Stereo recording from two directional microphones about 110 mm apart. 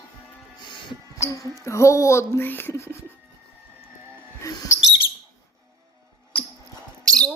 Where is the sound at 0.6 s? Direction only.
45° left (ahead or behind).